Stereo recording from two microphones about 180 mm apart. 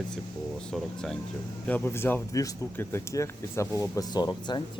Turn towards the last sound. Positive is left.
turn(degrees=25)  # may be behind; listen again after turning